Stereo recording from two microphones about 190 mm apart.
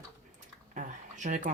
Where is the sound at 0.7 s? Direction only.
40° right (ahead or behind).